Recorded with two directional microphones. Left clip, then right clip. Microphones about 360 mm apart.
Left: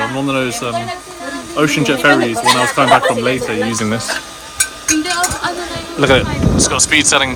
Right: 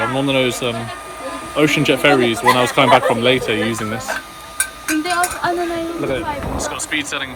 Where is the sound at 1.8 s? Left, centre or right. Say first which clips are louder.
Left 3 dB; centre.